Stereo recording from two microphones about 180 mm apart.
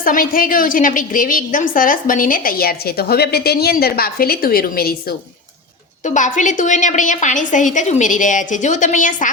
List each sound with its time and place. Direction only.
0.0 s a woman's voice: 50° left (ahead or behind)
6.1 s a woman's voice: 45° left (ahead or behind)